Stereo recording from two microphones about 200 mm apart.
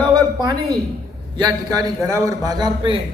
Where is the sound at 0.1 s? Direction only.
20° right (ahead or behind).